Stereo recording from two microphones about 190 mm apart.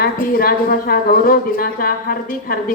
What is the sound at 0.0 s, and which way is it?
A woman's voice, 50° left (ahead or behind).